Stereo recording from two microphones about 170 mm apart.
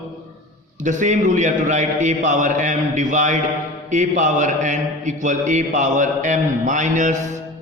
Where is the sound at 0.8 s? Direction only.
45° right (ahead or behind).